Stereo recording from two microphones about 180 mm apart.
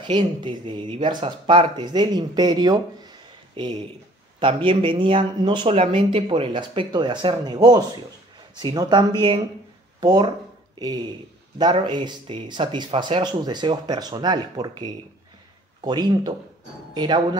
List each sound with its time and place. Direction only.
0.0 s speech: 25° right (ahead or behind)
11.5 s speech: 25° right (ahead or behind)